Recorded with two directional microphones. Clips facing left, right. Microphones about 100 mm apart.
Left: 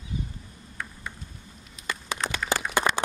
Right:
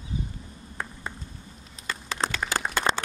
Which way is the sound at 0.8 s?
30° right (ahead or behind).